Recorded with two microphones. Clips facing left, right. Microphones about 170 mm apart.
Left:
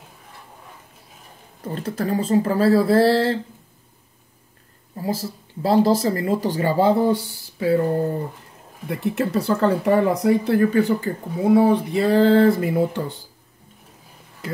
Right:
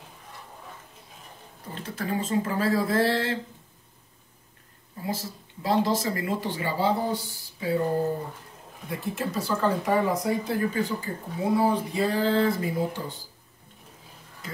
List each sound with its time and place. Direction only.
1.8 s speech: 40° left (ahead or behind)
5.0 s speech: 35° left (ahead or behind)
7.0 s speech: 65° left (ahead or behind)
8.8 s speech: 65° left (ahead or behind)